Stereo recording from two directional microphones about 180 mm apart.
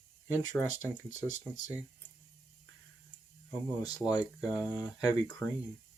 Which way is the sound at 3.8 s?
20° left (ahead or behind).